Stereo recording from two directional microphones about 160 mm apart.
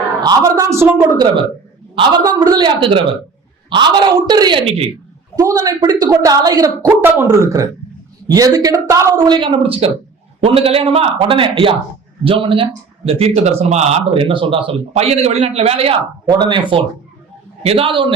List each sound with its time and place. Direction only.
0.2 s a woman's voice: 25° right (ahead or behind)
5.5 s a woman's voice: 25° right (ahead or behind)